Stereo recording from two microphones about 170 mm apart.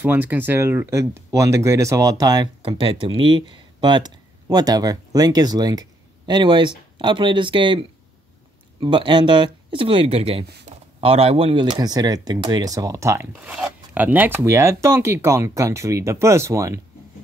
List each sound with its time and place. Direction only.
0.0 s speech: 10° right (ahead or behind)